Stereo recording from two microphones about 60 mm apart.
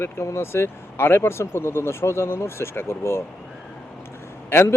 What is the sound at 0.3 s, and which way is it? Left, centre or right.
A man's voice, left.